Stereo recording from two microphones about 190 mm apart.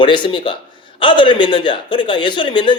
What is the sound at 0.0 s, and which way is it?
A man's voice, 25° left (ahead or behind).